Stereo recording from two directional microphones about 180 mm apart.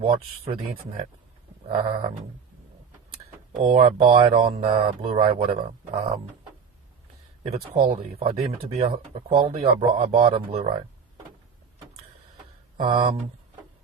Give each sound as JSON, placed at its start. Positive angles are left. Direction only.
{"t": 0.0, "sound": "speech", "side_deg": -30}
{"t": 1.6, "sound": "a sound", "side_deg": -35}
{"t": 3.5, "sound": "speech", "side_deg": -45}
{"t": 4.0, "sound": "speech", "side_deg": -30}
{"t": 7.4, "sound": "speech", "side_deg": -35}
{"t": 12.8, "sound": "speech", "side_deg": -30}